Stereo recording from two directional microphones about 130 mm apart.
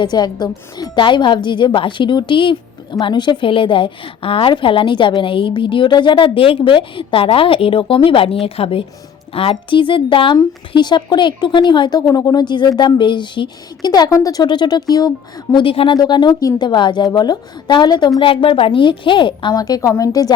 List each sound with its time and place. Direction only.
0.0 s a woman's voice: 35° left (ahead or behind)
15.5 s speech: 45° left (ahead or behind)
16.0 s a woman's voice: 35° left (ahead or behind)